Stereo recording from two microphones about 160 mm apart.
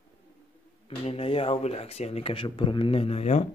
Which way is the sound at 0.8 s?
40° left (ahead or behind).